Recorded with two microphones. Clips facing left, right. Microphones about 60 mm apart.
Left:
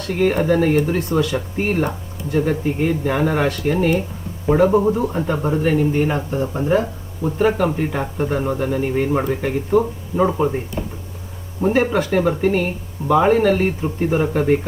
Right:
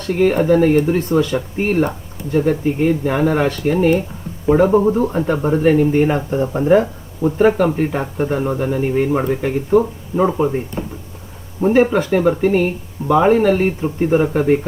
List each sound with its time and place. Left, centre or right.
0.1 s speech: centre
11.6 s speech: centre